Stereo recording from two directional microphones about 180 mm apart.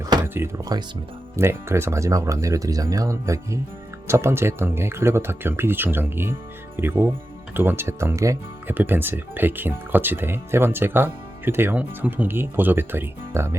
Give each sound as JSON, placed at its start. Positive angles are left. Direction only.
{"t": 0.0, "sound": "music", "side_deg": -20}
{"t": 1.4, "sound": "speech", "side_deg": -15}